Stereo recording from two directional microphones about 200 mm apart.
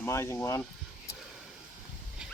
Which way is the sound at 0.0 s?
15° left (ahead or behind).